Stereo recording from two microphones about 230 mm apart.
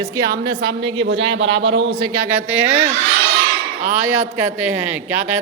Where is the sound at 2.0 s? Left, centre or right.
Centre.